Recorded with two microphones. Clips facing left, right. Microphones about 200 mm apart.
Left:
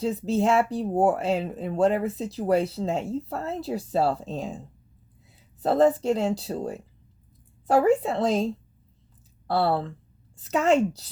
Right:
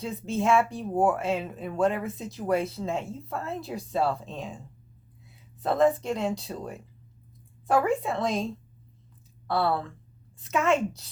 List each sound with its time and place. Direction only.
0.0 s speech: 35° left (ahead or behind)
5.6 s speech: 30° left (ahead or behind)
9.5 s speech: 30° left (ahead or behind)